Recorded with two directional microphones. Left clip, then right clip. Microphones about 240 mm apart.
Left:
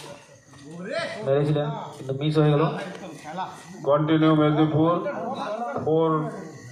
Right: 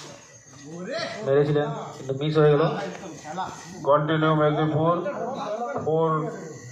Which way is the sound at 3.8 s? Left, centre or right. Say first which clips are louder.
Even; left.